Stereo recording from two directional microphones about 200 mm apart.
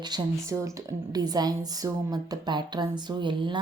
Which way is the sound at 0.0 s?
20° right (ahead or behind).